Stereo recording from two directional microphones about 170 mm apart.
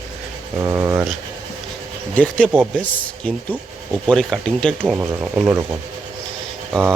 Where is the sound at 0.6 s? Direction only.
15° right (ahead or behind).